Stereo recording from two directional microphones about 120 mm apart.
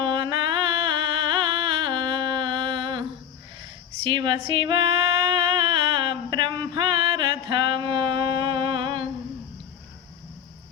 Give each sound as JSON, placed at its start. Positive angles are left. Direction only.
{"t": 0.0, "sound": "music", "side_deg": -40}
{"t": 4.0, "sound": "speech", "side_deg": -40}
{"t": 5.5, "sound": "a sound", "side_deg": -45}